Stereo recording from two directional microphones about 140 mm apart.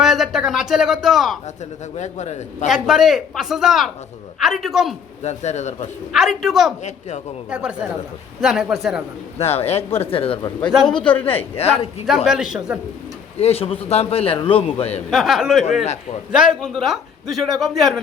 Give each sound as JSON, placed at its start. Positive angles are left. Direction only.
{"t": 0.0, "sound": "a sound", "side_deg": -5}
{"t": 2.0, "sound": "a man's voice", "side_deg": 55}
{"t": 2.6, "sound": "a man's voice", "side_deg": 0}
{"t": 5.2, "sound": "a man's voice", "side_deg": 55}
{"t": 6.1, "sound": "a man's voice", "side_deg": 0}
{"t": 9.4, "sound": "a man's voice", "side_deg": 45}
{"t": 11.0, "sound": "a man's voice", "side_deg": 10}
{"t": 11.5, "sound": "a man's voice", "side_deg": 45}
{"t": 12.0, "sound": "a man's voice", "side_deg": 0}
{"t": 13.4, "sound": "a man's voice", "side_deg": 45}
{"t": 15.1, "sound": "a man's voice", "side_deg": 0}